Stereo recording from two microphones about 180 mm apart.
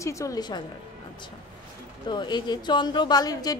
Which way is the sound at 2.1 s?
25° left (ahead or behind).